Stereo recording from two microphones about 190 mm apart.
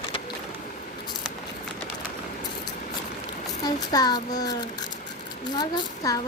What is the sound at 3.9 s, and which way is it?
Speech, 20° left (ahead or behind).